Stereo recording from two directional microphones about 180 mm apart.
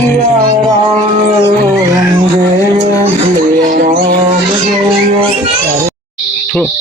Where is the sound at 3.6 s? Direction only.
45° right (ahead or behind).